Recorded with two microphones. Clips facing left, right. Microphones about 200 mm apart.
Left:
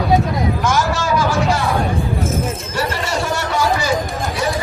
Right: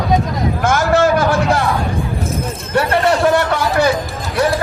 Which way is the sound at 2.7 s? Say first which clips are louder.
Right 8 dB; 60° right (ahead or behind).